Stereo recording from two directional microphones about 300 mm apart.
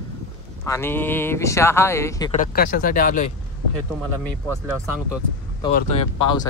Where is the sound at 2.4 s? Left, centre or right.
Left.